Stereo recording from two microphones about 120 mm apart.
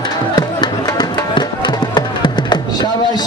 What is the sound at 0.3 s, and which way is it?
Music, 35° left (ahead or behind).